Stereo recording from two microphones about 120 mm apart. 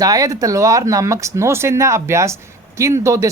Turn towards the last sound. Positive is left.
turn(degrees=-25)  # may be behind; listen again after turning